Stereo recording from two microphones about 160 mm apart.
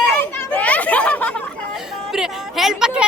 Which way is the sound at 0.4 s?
10° left (ahead or behind).